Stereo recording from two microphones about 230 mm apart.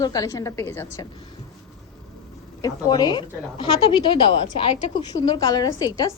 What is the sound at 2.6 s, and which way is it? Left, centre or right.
A woman's voice, centre.